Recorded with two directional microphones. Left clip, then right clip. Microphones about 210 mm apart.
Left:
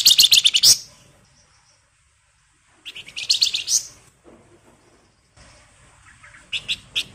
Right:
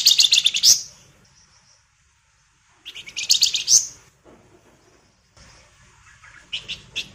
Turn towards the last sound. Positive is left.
turn(degrees=20)  # may be behind; listen again after turning